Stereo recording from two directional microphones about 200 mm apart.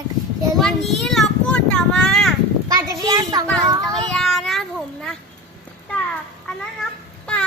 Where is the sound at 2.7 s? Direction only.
15° right (ahead or behind).